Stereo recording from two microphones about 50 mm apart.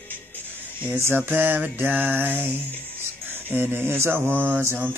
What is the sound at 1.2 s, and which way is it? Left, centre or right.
Music, right.